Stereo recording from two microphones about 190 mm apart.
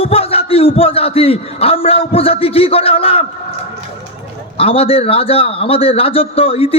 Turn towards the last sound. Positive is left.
turn(degrees=30)  # may be behind; listen again after turning